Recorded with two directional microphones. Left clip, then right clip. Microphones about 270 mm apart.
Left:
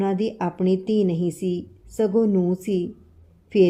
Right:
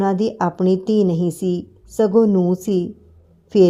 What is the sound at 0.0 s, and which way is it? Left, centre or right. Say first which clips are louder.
A woman's voice: right 5 dB; right.